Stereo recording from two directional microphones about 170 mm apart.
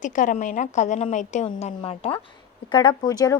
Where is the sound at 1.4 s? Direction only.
35° left (ahead or behind).